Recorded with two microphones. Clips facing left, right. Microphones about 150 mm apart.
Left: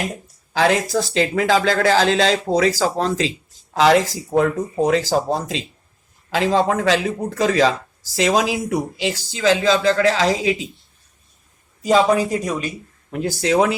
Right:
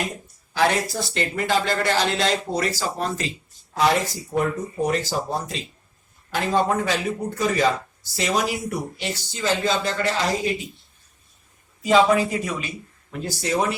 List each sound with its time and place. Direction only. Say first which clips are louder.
0.5 s speech: left 4 dB; 90° left
11.8 s speech: left 2 dB; 40° left (ahead or behind)
13.4 s speech: left 6 dB; 90° left